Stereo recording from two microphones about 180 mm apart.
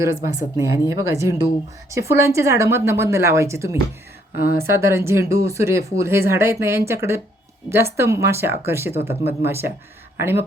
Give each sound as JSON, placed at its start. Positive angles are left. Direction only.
{"t": 0.0, "sound": "speech", "side_deg": -20}